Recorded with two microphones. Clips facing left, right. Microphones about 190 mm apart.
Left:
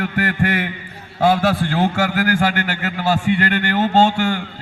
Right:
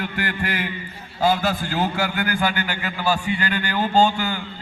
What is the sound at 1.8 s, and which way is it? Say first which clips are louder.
A man's voice: left 4 dB; 85° left.